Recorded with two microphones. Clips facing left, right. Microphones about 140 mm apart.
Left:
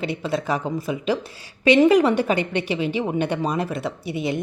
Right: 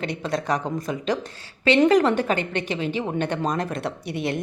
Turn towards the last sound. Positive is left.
turn(degrees=0)  # may be behind; listen again after turning